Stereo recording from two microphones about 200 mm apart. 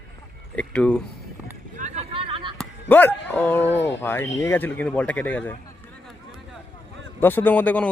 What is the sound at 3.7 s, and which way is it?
Speech, 65° left (ahead or behind).